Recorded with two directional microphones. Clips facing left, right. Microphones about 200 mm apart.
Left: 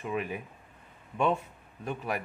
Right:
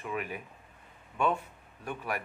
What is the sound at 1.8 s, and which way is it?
Speech, 20° left (ahead or behind).